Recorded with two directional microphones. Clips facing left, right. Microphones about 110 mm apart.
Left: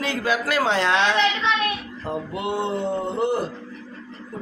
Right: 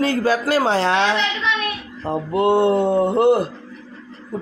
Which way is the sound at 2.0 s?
45° right (ahead or behind).